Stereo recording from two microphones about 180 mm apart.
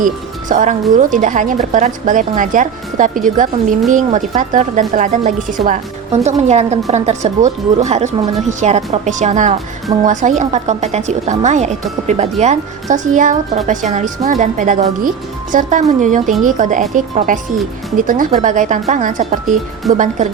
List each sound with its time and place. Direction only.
0.0 s speech: 45° right (ahead or behind)